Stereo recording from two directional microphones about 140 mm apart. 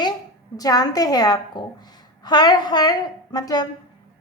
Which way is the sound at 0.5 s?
25° left (ahead or behind).